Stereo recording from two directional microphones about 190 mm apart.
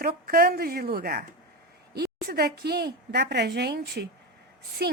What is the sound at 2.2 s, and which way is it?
A woman's voice, 55° right (ahead or behind).